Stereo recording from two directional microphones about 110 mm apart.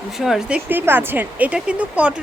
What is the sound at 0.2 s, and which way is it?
Speech, 5° right (ahead or behind).